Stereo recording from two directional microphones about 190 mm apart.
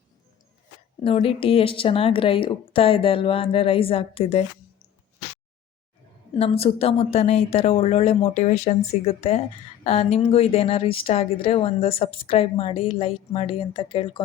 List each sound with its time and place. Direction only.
1.0 s speech: 30° left (ahead or behind)
6.3 s speech: 30° left (ahead or behind)